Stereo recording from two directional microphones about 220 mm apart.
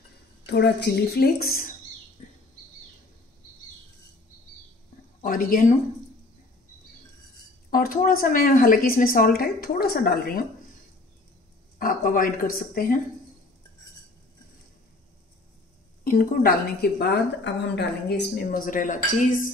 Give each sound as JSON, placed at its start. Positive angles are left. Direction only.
{"t": 0.5, "sound": "a woman's voice", "side_deg": 50}
{"t": 5.2, "sound": "speech", "side_deg": 40}
{"t": 7.7, "sound": "a woman's voice", "side_deg": 40}
{"t": 11.8, "sound": "a woman's voice", "side_deg": 40}
{"t": 16.0, "sound": "a woman's voice", "side_deg": 40}